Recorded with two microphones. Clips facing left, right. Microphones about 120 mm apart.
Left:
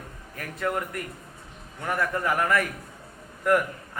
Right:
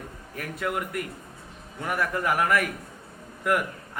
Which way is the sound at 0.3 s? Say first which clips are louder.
Left 1 dB; 5° right (ahead or behind).